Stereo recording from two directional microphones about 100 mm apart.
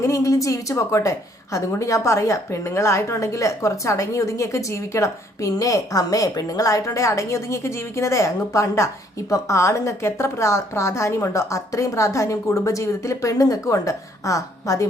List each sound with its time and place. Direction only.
0.0 s a woman's voice: 35° left (ahead or behind)